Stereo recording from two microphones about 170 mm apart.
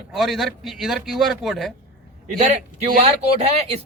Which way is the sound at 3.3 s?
40° right (ahead or behind).